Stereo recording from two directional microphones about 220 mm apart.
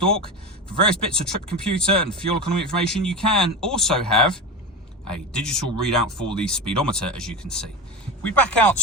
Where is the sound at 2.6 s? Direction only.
5° left (ahead or behind).